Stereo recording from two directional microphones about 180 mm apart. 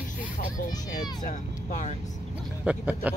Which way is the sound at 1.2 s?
45° left (ahead or behind).